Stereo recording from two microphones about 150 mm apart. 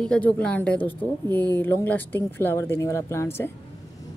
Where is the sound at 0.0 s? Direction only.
5° left (ahead or behind).